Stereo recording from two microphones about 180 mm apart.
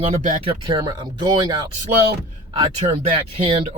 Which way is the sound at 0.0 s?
40° right (ahead or behind).